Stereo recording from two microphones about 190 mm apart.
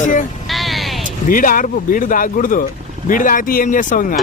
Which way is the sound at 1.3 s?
45° left (ahead or behind).